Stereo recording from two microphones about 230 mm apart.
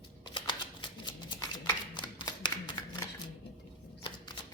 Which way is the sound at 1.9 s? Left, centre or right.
Centre.